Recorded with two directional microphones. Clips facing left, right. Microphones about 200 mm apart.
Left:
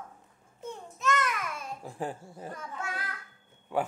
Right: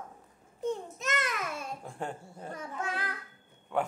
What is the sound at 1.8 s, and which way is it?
Speech, 5° left (ahead or behind).